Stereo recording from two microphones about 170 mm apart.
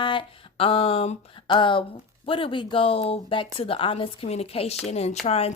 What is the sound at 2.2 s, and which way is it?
A woman's voice, 30° left (ahead or behind).